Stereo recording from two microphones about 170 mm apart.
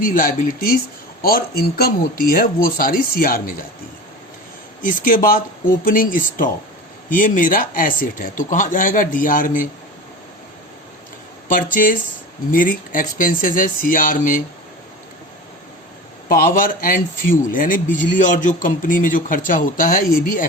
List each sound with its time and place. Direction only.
0.0 s speech: 55° left (ahead or behind)
4.9 s speech: 55° left (ahead or behind)
11.7 s speech: 55° left (ahead or behind)
16.3 s speech: 55° left (ahead or behind)